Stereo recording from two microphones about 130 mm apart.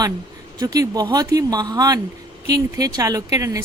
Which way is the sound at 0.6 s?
30° right (ahead or behind).